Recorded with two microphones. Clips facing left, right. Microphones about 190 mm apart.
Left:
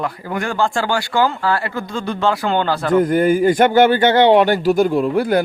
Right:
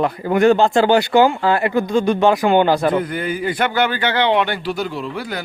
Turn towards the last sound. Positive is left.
turn(degrees=50)  # may be behind; listen again after turning